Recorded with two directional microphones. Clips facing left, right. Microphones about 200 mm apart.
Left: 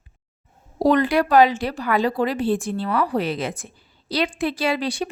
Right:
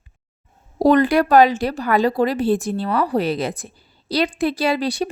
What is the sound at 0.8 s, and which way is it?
Speech, 45° right (ahead or behind).